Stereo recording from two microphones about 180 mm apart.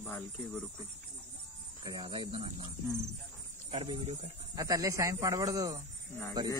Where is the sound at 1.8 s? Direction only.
25° right (ahead or behind).